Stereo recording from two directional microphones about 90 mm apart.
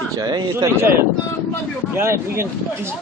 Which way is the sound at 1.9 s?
30° right (ahead or behind).